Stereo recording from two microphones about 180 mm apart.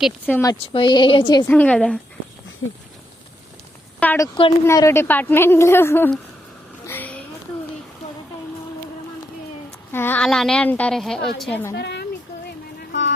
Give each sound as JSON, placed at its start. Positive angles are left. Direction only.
{"t": 0.3, "sound": "a woman's voice", "side_deg": 10}
{"t": 0.7, "sound": "a woman's voice", "side_deg": 25}
{"t": 1.5, "sound": "a woman's voice", "side_deg": 10}
{"t": 2.6, "sound": "a sound", "side_deg": 90}
{"t": 4.0, "sound": "a woman's voice", "side_deg": 10}
{"t": 6.8, "sound": "a sound", "side_deg": 10}
{"t": 9.9, "sound": "a woman's voice", "side_deg": 10}
{"t": 11.7, "sound": "a woman's voice", "side_deg": 65}
{"t": 12.8, "sound": "vehicle", "side_deg": 80}